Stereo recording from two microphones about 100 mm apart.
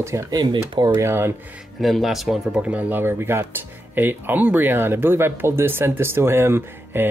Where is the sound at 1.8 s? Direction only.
Centre (ahead or behind).